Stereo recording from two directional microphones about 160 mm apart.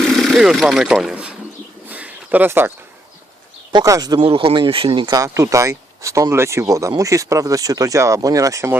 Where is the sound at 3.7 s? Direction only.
20° right (ahead or behind).